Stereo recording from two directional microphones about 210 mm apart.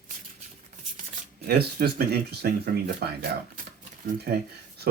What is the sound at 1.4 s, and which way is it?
Speech, 45° right (ahead or behind).